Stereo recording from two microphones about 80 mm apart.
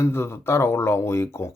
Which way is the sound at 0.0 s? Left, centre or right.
Left.